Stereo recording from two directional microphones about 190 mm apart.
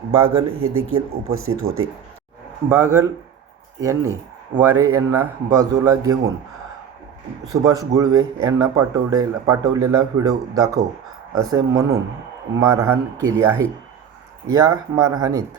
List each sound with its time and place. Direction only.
0.1 s speech: 30° right (ahead or behind)
0.6 s speech: 90° right
2.6 s a man's voice: 15° right (ahead or behind)
7.5 s a man's voice: 20° right (ahead or behind)